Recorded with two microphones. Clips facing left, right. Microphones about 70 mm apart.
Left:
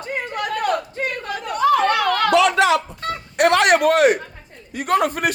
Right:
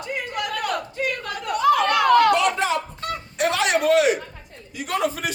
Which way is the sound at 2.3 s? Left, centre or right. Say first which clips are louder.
Left 5 dB; left.